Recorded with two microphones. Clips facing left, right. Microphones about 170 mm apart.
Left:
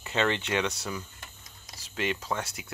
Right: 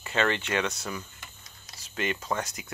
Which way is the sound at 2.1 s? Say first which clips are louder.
Right 1 dB; 5° left (ahead or behind).